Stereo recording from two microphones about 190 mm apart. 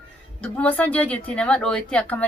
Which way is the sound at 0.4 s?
5° left (ahead or behind).